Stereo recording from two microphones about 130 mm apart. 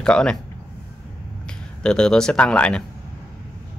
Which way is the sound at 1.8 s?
5° left (ahead or behind).